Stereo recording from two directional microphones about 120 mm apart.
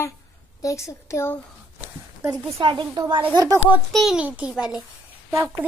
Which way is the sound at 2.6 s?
40° right (ahead or behind).